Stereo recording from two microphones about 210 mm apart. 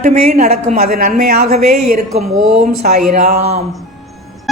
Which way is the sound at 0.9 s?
45° right (ahead or behind).